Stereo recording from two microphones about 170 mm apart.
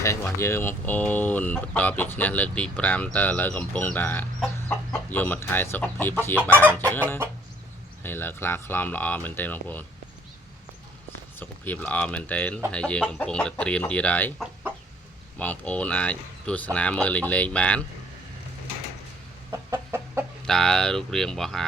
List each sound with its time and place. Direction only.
0.0 s speech: 15° left (ahead or behind)
6.5 s chicken: 10° right (ahead or behind)
6.7 s speech: 10° left (ahead or behind)
11.3 s speech: 10° left (ahead or behind)
15.4 s speech: 10° left (ahead or behind)
19.5 s chicken: 15° right (ahead or behind)
20.5 s speech: 5° left (ahead or behind)